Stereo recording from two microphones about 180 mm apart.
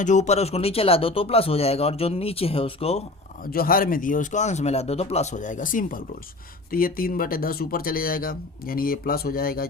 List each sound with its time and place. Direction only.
0.0 s speech: 40° left (ahead or behind)
3.4 s speech: 55° left (ahead or behind)